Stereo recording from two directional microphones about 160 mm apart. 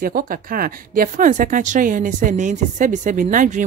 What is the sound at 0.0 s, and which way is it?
A woman's voice, 65° right (ahead or behind).